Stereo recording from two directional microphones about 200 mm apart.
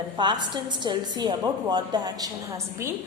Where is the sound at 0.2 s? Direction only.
20° right (ahead or behind).